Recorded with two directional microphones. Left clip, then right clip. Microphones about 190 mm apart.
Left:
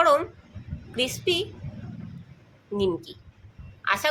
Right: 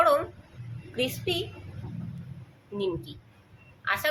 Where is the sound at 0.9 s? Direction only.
30° left (ahead or behind).